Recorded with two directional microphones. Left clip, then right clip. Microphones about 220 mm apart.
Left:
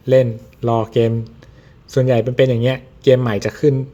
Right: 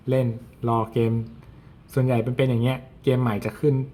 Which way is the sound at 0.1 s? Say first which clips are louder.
Left 11 dB; 25° left (ahead or behind).